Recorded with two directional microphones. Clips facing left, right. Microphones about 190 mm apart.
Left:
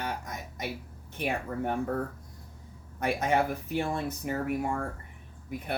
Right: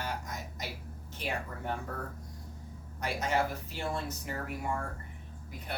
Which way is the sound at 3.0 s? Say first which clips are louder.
Left 4 dB; 60° left (ahead or behind).